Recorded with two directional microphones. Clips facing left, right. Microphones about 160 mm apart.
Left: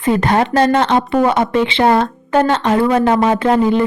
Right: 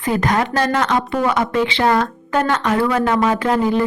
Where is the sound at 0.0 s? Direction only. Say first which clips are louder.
Left 4 dB; 25° left (ahead or behind).